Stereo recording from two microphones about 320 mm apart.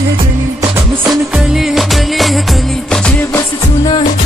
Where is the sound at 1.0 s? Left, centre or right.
Centre.